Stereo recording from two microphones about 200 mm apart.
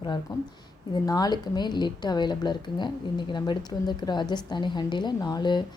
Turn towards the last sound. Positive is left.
turn(degrees=20)  # may be behind; listen again after turning